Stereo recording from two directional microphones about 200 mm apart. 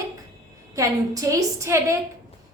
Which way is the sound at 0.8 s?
15° right (ahead or behind).